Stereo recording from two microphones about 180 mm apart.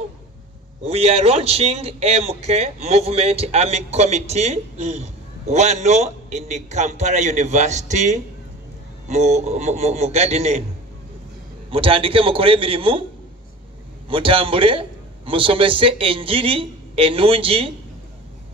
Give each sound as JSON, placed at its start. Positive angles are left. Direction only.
{"t": 0.8, "sound": "a man's voice", "side_deg": -35}
{"t": 11.7, "sound": "a man's voice", "side_deg": -30}
{"t": 14.0, "sound": "a man's voice", "side_deg": -30}